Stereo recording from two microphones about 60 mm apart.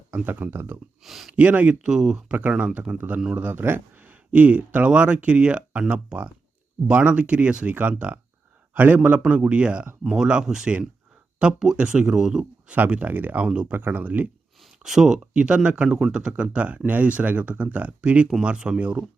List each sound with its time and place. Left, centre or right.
0.1 s speech: right
1.0 s speech: centre
1.4 s speech: right
2.3 s speech: right
3.3 s speech: right; by 10.8 s centre
11.8 s speech: centre
12.7 s speech: right
13.7 s speech: right
14.6 s speech: centre